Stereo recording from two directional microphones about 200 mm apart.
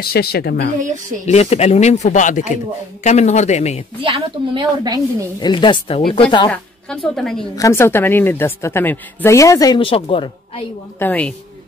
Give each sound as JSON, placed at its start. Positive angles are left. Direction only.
{"t": 0.0, "sound": "a woman's voice", "side_deg": 50}
{"t": 1.2, "sound": "speech", "side_deg": 35}
{"t": 4.0, "sound": "a woman's voice", "side_deg": -25}
{"t": 5.4, "sound": "speech", "side_deg": 25}
{"t": 7.2, "sound": "a woman's voice", "side_deg": 0}
{"t": 7.5, "sound": "a woman's voice", "side_deg": 15}
{"t": 11.0, "sound": "a woman's voice", "side_deg": 10}